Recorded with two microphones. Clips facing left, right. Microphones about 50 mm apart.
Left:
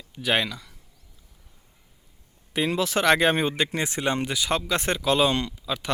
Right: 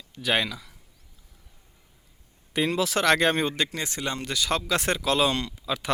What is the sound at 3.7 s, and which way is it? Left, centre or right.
Speech, left.